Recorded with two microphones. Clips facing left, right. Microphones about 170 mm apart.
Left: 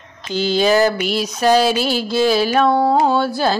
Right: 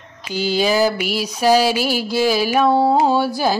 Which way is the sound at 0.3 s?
10° right (ahead or behind).